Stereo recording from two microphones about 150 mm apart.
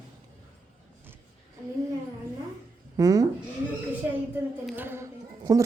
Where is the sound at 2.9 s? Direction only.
25° right (ahead or behind).